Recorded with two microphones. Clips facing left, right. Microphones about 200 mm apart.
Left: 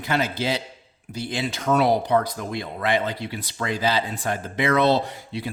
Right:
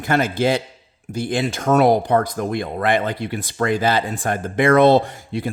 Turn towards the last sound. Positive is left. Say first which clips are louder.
# right 7 dB
turn(degrees=-50)  # may be behind; listen again after turning